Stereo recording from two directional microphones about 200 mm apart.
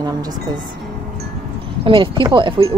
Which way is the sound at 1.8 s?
25° right (ahead or behind).